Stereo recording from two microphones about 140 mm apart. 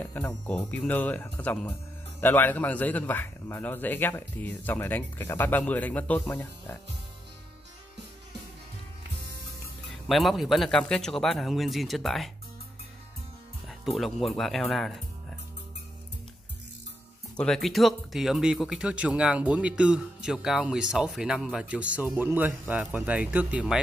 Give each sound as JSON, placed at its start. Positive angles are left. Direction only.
{"t": 0.0, "sound": "speech", "side_deg": 10}
{"t": 10.0, "sound": "a man's voice", "side_deg": 0}
{"t": 13.7, "sound": "a man's voice", "side_deg": 0}
{"t": 17.4, "sound": "speech", "side_deg": 0}